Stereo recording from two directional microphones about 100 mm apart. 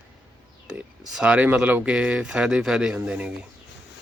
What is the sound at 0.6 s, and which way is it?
Speech, 5° right (ahead or behind).